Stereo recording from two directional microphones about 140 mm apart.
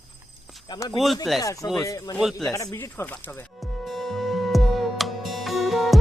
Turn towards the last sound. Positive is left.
turn(degrees=0)  # may be behind; listen again after turning